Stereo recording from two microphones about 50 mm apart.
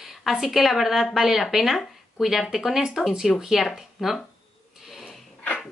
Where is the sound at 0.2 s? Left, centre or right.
Centre.